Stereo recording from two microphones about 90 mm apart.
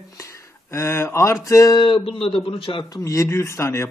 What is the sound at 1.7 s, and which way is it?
Speech, 65° left (ahead or behind).